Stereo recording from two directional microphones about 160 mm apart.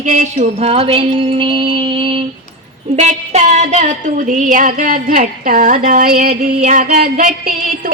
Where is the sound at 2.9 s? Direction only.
45° right (ahead or behind); by 6.6 s 65° right (ahead or behind).